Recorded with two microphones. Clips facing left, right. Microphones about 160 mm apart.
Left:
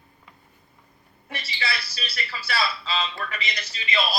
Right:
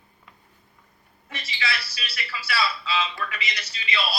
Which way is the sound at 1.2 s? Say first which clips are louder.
Even; 35° left (ahead or behind).